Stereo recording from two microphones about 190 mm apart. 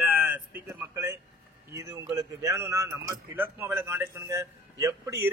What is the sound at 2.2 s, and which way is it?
A man's voice, 15° right (ahead or behind).